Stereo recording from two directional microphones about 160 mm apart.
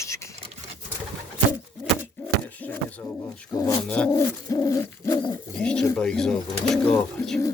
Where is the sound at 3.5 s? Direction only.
20° left (ahead or behind).